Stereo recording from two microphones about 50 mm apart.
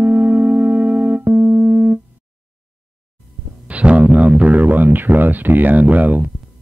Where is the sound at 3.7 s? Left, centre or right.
Right.